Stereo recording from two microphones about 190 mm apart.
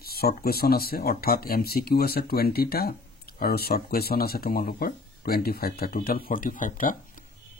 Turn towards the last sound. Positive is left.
turn(degrees=45)  # may be behind; listen again after turning